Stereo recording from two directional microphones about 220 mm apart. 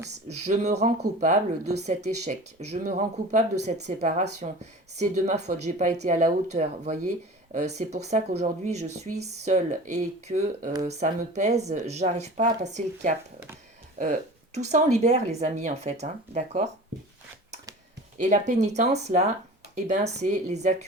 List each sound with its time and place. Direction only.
0.3 s speech: 30° right (ahead or behind)
18.2 s speech: 35° right (ahead or behind)